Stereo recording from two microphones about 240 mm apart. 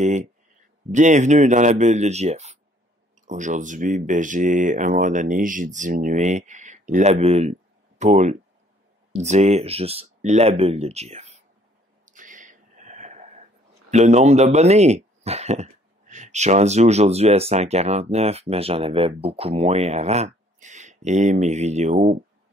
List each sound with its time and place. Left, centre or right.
0.9 s speech: right
12.1 s a sound: right
13.8 s speech: right